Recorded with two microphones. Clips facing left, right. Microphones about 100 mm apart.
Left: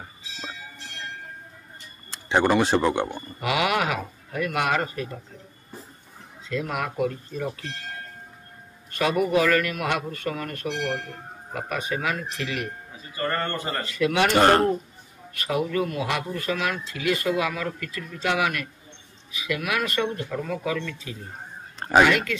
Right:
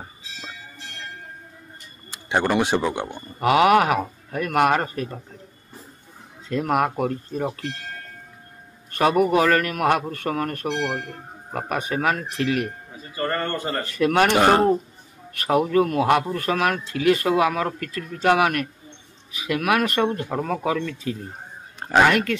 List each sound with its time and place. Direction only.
2.0 s a sound: 10° right (ahead or behind)
2.5 s speech: 10° right (ahead or behind)
3.3 s speech: 45° right (ahead or behind)
6.5 s speech: 50° right (ahead or behind)
8.9 s speech: 45° right (ahead or behind)
13.8 s speech: 50° right (ahead or behind)
14.3 s speech: 5° right (ahead or behind)
15.3 s speech: 45° right (ahead or behind)
20.2 s speech: 45° right (ahead or behind)